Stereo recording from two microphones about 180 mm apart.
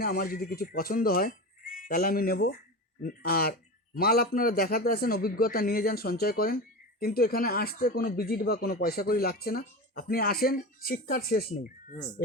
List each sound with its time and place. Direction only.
0.0 s speech: 55° left (ahead or behind)